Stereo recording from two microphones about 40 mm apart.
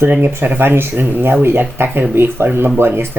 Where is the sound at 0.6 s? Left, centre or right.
Right.